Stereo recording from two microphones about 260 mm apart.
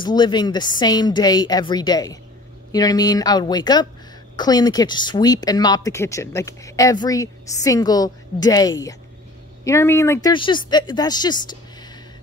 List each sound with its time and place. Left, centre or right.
0.0 s a woman's voice: centre